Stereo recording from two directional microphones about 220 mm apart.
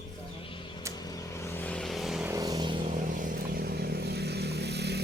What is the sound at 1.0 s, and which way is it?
Vehicle, 15° left (ahead or behind).